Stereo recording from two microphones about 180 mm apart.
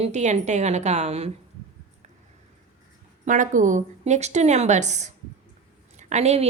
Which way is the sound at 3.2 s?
45° right (ahead or behind).